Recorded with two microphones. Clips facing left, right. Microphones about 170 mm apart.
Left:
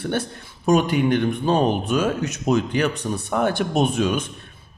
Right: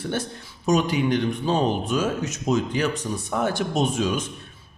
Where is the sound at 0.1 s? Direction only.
60° left (ahead or behind).